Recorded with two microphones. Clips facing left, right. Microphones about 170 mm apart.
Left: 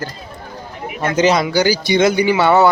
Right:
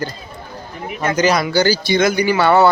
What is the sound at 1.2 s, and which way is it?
Speech, 25° left (ahead or behind).